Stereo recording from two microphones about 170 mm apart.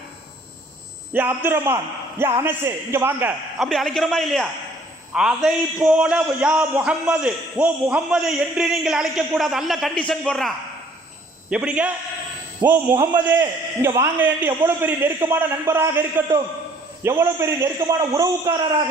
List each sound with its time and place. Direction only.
1.1 s a man's voice: 10° right (ahead or behind)
3.6 s a man's voice: centre (ahead or behind)
11.5 s a man's voice: 5° right (ahead or behind)